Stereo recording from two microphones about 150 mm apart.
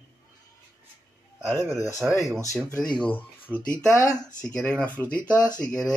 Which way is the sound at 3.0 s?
10° left (ahead or behind).